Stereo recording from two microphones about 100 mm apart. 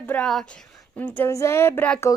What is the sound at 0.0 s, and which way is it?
Speech, 15° left (ahead or behind).